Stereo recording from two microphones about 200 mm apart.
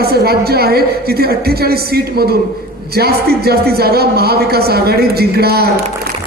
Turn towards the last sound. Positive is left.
turn(degrees=-50)  # may be behind; listen again after turning